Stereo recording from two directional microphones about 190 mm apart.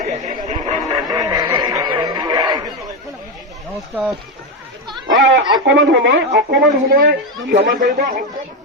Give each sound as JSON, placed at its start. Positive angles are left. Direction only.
{"t": 0.0, "sound": "a sound", "side_deg": -40}
{"t": 0.9, "sound": "music", "side_deg": -20}
{"t": 3.8, "sound": "speech", "side_deg": -10}
{"t": 5.0, "sound": "a sound", "side_deg": -75}
{"t": 5.6, "sound": "speech", "side_deg": -70}
{"t": 6.1, "sound": "a woman's voice", "side_deg": -55}
{"t": 7.7, "sound": "speech", "side_deg": -45}